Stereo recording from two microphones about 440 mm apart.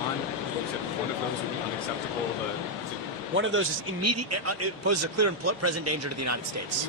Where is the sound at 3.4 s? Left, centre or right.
Right.